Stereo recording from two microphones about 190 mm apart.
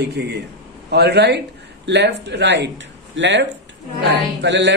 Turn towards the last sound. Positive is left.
turn(degrees=-65)  # may be behind; listen again after turning